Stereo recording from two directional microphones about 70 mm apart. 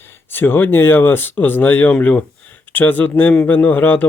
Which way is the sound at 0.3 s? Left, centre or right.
Left.